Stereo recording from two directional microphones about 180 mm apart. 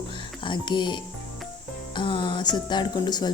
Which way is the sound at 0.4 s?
25° left (ahead or behind).